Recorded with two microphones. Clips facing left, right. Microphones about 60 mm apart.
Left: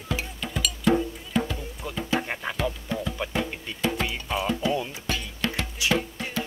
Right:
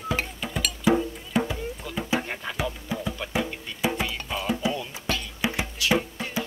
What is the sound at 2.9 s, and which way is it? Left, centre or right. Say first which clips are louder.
Music: left 1 dB; centre.